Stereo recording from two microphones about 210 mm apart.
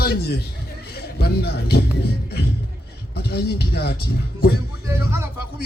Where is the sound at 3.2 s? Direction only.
50° left (ahead or behind).